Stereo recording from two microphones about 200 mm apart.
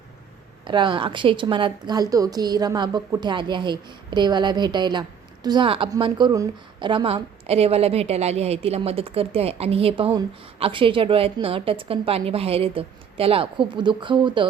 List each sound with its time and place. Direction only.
0.6 s a woman's voice: 25° right (ahead or behind)